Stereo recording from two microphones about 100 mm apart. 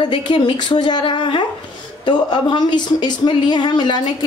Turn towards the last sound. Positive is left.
turn(degrees=45)  # may be behind; listen again after turning